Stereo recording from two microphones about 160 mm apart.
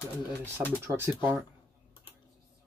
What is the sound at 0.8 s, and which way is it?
Speech, 15° right (ahead or behind).